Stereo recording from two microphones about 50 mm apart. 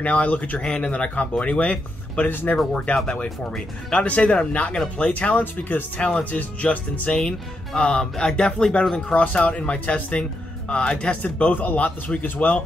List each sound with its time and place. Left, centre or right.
0.0 s speech: left
0.6 s speech: centre
2.2 s speech: left
2.7 s speech: left
5.4 s speech: left
5.9 s speech: left
11.5 s speech: left